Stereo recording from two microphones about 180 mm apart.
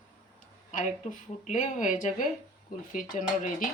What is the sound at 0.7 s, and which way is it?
Speech, 40° left (ahead or behind).